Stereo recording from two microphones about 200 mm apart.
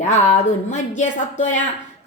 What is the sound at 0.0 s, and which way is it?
A woman's voice, 35° left (ahead or behind).